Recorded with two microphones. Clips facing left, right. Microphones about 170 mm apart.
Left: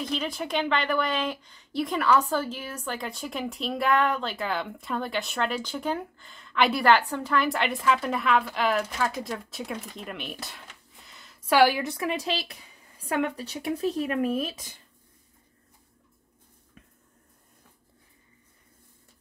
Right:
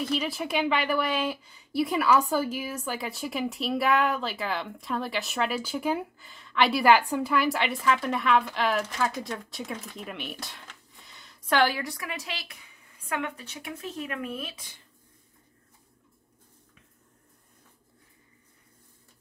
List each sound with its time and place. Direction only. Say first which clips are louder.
0.0 s a woman's voice: right 1 dB; 5° right (ahead or behind)
11.1 s a sound: left 2 dB; centre (ahead or behind)
11.8 s speech: left 7 dB; 25° left (ahead or behind)